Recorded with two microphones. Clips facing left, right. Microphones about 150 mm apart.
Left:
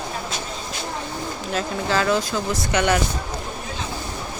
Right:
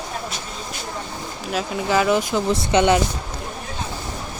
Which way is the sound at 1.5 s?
15° right (ahead or behind).